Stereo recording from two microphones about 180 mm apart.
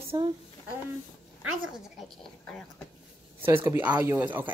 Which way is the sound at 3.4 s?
15° right (ahead or behind).